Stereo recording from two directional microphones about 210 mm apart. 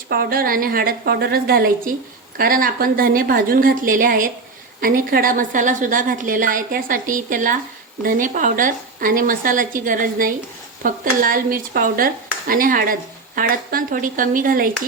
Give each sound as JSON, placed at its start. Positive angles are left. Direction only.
{"t": 0.1, "sound": "a woman's voice", "side_deg": -45}